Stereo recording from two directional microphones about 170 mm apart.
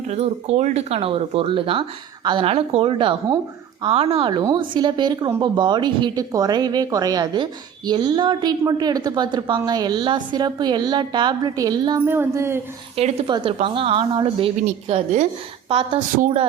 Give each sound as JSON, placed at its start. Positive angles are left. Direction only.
{"t": 0.1, "sound": "a woman's voice", "side_deg": -40}
{"t": 13.0, "sound": "a woman's voice", "side_deg": -35}